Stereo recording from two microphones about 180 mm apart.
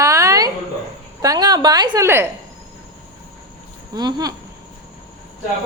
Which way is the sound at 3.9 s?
20° right (ahead or behind).